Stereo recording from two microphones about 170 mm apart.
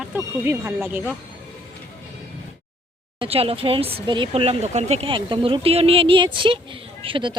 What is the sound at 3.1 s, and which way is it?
Speech, 35° right (ahead or behind).